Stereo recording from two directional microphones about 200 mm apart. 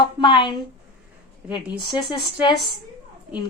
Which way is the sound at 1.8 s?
25° left (ahead or behind).